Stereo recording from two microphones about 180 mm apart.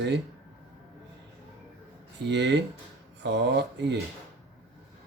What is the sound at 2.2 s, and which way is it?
Speech, 75° right (ahead or behind).